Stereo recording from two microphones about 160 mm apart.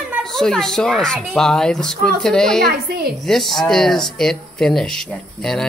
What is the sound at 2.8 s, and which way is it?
Speech, 70° right (ahead or behind).